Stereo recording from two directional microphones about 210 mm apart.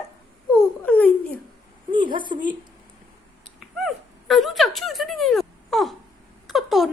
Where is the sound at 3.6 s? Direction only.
Centre (ahead or behind).